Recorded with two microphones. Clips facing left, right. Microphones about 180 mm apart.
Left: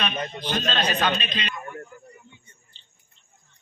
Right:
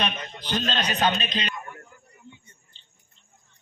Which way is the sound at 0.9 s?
40° right (ahead or behind).